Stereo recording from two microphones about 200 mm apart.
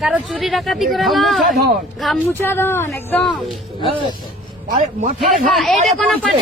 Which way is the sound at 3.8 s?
25° right (ahead or behind).